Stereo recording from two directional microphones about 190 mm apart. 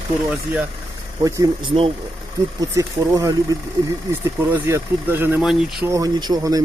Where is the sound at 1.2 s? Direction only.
20° right (ahead or behind).